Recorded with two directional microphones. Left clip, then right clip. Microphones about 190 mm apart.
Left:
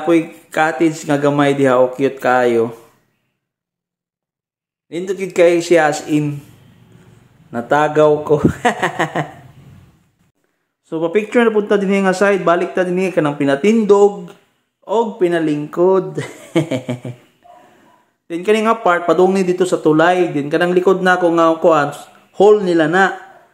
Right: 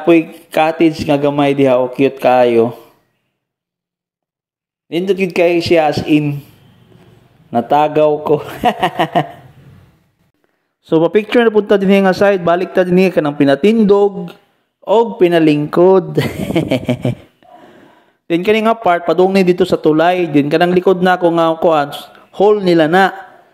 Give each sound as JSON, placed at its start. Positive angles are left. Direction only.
{"t": 0.4, "sound": "a man's voice", "side_deg": -25}
{"t": 4.8, "sound": "a man's voice", "side_deg": -25}
{"t": 7.5, "sound": "a man's voice", "side_deg": -25}
{"t": 10.8, "sound": "a man's voice", "side_deg": -40}